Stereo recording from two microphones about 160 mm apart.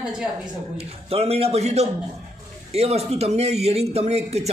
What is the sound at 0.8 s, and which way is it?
Speech, 40° right (ahead or behind).